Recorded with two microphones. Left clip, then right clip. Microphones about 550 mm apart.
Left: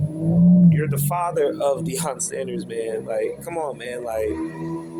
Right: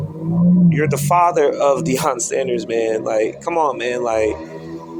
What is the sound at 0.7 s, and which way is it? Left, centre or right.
Speech, left.